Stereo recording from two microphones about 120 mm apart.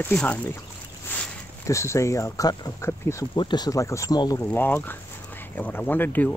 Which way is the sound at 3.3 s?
40° left (ahead or behind).